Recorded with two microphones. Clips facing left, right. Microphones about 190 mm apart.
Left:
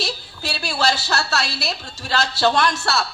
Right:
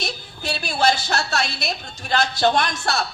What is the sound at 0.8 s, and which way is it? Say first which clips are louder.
A woman's voice: right 1 dB; 20° right (ahead or behind).